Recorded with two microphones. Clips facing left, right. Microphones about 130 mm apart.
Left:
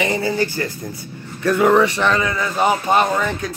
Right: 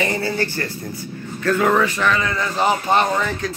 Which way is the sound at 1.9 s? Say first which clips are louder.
Left 2 dB; 25° left (ahead or behind).